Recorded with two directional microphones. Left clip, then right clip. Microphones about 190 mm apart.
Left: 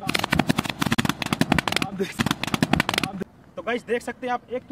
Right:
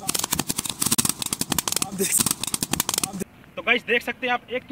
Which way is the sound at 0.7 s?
Centre (ahead or behind).